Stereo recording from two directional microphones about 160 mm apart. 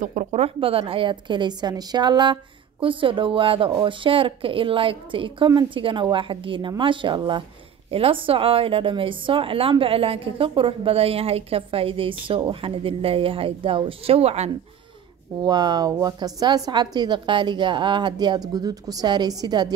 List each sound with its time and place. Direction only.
0.0 s a woman's voice: 50° right (ahead or behind)
15.4 s a woman's voice: 25° right (ahead or behind)